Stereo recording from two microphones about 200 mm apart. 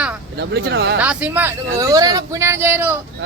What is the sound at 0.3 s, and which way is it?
Speech, 55° right (ahead or behind).